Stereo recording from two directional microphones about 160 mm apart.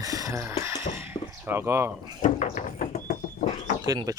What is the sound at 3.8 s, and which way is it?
Speech, 25° right (ahead or behind).